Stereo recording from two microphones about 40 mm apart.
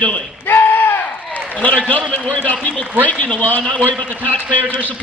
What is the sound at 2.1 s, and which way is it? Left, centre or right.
A man's voice, left.